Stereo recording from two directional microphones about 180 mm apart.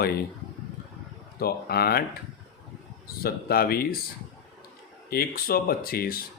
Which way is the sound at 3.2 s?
55° left (ahead or behind).